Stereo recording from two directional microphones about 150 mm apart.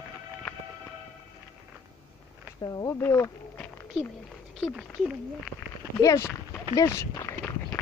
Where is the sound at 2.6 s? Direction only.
20° left (ahead or behind).